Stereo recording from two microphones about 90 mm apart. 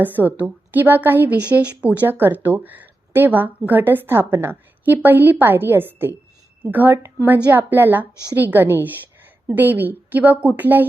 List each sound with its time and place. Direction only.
0.0 s a woman's voice: 20° right (ahead or behind)